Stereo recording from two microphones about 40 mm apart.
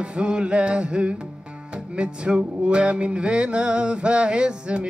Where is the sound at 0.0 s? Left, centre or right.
Right.